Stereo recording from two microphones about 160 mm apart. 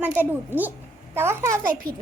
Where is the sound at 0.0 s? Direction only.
10° right (ahead or behind).